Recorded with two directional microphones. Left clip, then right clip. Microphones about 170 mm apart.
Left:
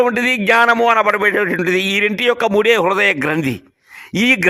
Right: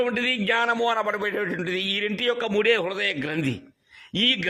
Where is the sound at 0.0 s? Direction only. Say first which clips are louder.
Left 9 dB; 30° left (ahead or behind).